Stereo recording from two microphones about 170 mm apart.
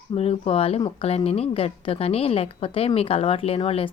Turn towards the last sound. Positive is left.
turn(degrees=35)  # may be behind; listen again after turning